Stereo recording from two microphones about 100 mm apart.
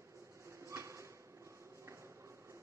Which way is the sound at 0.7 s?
30° right (ahead or behind).